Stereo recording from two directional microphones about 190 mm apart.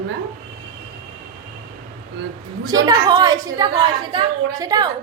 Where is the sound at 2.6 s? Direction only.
20° right (ahead or behind).